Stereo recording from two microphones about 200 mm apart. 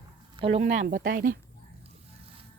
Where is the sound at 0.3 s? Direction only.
30° right (ahead or behind); by 1.4 s 45° right (ahead or behind).